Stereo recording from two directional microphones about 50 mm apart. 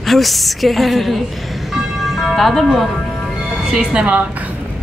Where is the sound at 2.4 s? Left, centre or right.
Centre.